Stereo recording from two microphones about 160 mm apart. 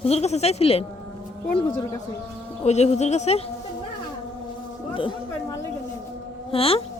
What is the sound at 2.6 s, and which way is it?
Speech, 45° left (ahead or behind).